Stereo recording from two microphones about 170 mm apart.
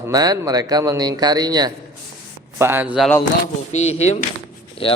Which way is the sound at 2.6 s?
15° right (ahead or behind).